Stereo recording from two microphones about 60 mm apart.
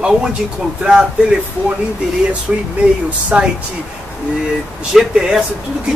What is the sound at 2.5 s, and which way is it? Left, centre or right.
Speech, centre.